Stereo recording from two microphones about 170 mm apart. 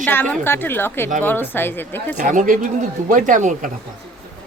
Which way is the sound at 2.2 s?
50° right (ahead or behind).